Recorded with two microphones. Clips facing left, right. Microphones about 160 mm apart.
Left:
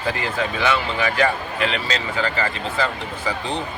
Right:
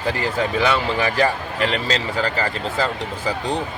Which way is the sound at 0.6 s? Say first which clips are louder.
Right 1 dB; 35° right (ahead or behind).